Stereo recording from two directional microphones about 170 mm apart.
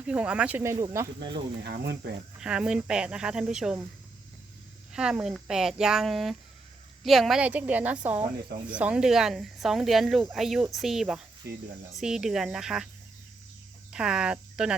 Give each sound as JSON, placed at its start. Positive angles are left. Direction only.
{"t": 0.0, "sound": "a woman's voice", "side_deg": -5}
{"t": 1.6, "sound": "speech", "side_deg": -75}
{"t": 2.4, "sound": "speech", "side_deg": -5}
{"t": 4.9, "sound": "a woman's voice", "side_deg": -5}
{"t": 11.4, "sound": "speech", "side_deg": -70}
{"t": 11.9, "sound": "speech", "side_deg": -5}
{"t": 13.9, "sound": "speech", "side_deg": -5}